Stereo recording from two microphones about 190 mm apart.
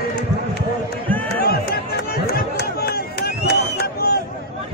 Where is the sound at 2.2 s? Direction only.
55° left (ahead or behind).